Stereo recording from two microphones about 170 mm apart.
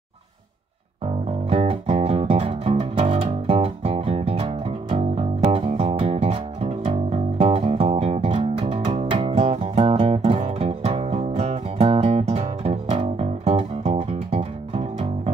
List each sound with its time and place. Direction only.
1.5 s music: 35° right (ahead or behind)